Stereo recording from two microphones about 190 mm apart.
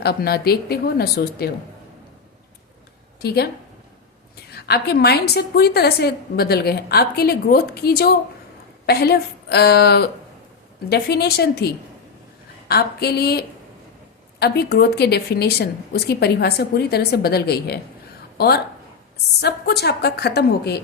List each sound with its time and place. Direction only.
0.0 s a woman's voice: 55° left (ahead or behind)
3.2 s speech: 55° left (ahead or behind)
4.5 s a woman's voice: 55° left (ahead or behind)